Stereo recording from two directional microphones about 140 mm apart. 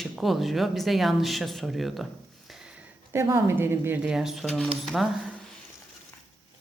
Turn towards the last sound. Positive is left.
turn(degrees=-5)  # may be behind; listen again after turning